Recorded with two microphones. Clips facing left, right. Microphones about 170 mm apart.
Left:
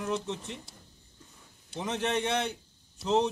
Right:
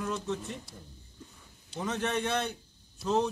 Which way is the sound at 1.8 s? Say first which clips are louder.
Left 1 dB; 20° left (ahead or behind).